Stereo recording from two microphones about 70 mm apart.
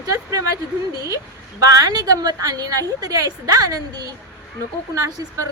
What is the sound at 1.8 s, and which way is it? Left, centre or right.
A woman's voice, right.